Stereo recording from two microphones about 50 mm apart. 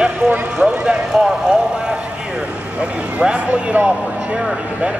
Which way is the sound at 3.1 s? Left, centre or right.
Right.